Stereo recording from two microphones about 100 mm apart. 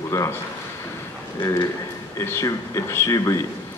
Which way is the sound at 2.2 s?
30° left (ahead or behind).